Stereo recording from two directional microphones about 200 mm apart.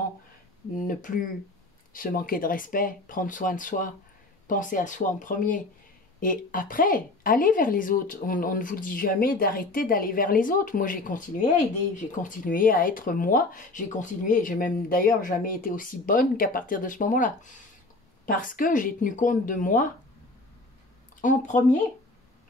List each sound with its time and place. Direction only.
0.7 s a woman's voice: 40° left (ahead or behind)
21.2 s speech: 40° left (ahead or behind)